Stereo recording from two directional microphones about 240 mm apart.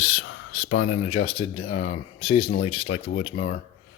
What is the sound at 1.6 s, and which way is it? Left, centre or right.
Speech, left.